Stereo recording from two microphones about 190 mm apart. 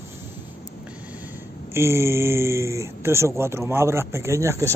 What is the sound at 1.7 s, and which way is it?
Speech, 15° right (ahead or behind).